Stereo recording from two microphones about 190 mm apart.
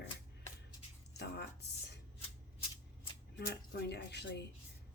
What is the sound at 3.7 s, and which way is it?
Speech, 60° left (ahead or behind).